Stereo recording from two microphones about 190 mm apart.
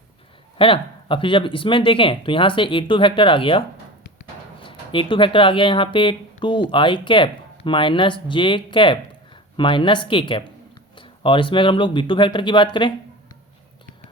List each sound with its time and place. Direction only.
0.6 s speech: 30° left (ahead or behind)
4.6 s speech: 25° left (ahead or behind)